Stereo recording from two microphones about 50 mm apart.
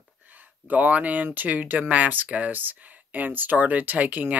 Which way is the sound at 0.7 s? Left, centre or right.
Right.